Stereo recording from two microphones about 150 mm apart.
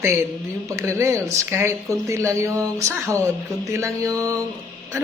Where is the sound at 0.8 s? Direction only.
20° right (ahead or behind).